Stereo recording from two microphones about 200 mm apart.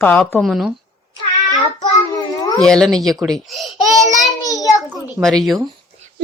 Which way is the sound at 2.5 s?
Centre (ahead or behind).